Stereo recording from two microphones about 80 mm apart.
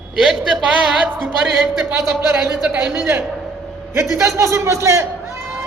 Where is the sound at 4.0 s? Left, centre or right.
Right.